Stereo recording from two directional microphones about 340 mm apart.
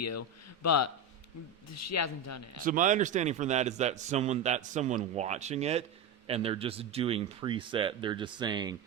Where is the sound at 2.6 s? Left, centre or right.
Right.